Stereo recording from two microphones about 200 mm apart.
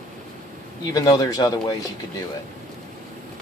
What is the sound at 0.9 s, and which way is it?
Speech, 20° left (ahead or behind).